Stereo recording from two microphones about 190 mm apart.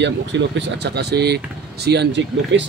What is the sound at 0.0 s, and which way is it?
Speech, 70° right (ahead or behind).